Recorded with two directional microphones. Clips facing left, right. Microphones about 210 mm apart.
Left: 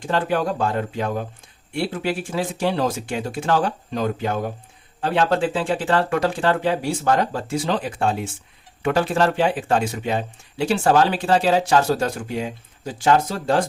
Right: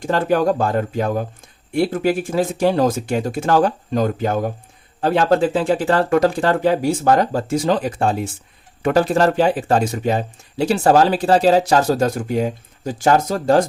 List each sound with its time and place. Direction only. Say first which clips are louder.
0.0 s speech: right 5 dB; 40° right (ahead or behind)